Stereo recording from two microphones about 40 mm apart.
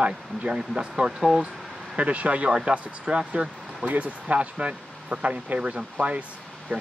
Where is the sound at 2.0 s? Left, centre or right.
Right.